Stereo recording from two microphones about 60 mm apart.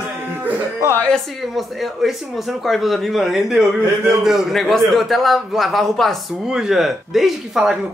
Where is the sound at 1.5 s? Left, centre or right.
Centre.